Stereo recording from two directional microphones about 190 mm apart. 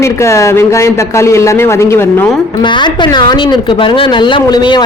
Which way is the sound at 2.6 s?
25° left (ahead or behind).